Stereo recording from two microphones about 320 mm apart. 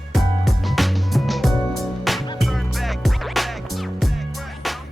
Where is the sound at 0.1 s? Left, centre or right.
Centre.